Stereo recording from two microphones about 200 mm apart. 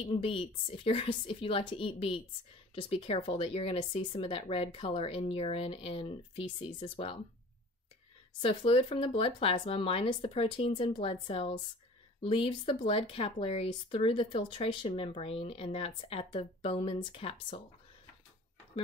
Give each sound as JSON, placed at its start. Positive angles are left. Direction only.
{"t": 0.0, "sound": "speech", "side_deg": 25}
{"t": 8.4, "sound": "speech", "side_deg": 30}